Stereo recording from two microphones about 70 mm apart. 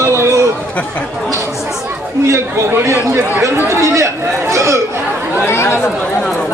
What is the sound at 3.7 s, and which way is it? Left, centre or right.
Chatter, right.